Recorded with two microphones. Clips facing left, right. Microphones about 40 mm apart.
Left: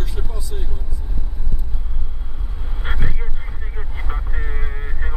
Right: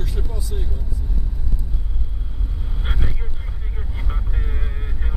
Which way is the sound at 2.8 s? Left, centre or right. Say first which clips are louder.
Left 3 dB; centre.